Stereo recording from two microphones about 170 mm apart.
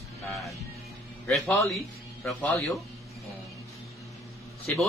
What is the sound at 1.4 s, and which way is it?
Speech, 15° left (ahead or behind).